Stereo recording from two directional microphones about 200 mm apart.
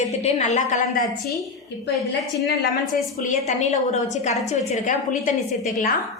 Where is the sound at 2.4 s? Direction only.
55° left (ahead or behind).